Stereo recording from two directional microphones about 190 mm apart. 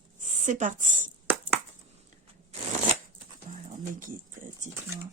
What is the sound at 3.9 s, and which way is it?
Speech, 45° right (ahead or behind).